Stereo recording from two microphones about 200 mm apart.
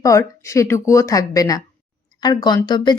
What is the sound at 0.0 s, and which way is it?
A woman's voice, 15° left (ahead or behind).